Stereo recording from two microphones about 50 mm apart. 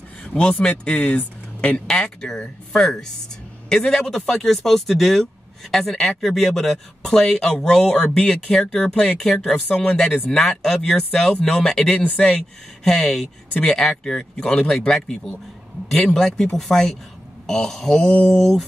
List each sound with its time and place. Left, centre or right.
0.3 s speech: left
1.9 s speech: centre
13.5 s speech: left
13.7 s speech: centre